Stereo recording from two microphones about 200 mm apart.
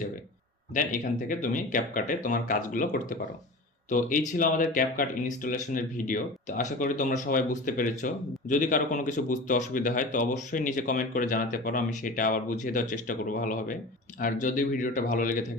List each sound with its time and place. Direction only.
0.7 s speech: 40° left (ahead or behind)